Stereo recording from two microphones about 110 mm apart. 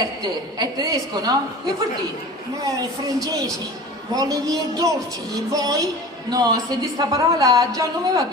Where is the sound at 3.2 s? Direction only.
30° right (ahead or behind).